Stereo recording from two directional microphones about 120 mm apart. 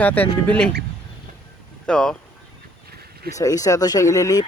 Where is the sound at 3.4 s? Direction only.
30° left (ahead or behind).